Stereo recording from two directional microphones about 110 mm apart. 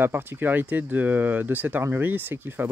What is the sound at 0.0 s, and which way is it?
Speech, 20° right (ahead or behind).